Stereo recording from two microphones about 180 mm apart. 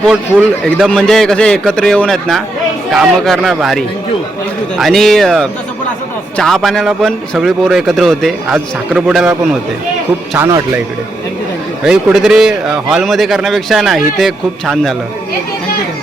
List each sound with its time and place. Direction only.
0.1 s a man's voice: centre (ahead or behind)
10.3 s speech: 15° right (ahead or behind)
11.9 s a man's voice: 5° right (ahead or behind)